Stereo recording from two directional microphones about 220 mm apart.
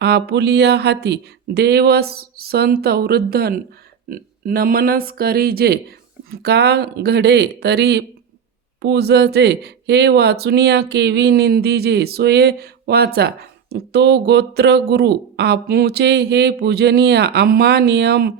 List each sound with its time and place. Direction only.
0.0 s speech: 50° right (ahead or behind)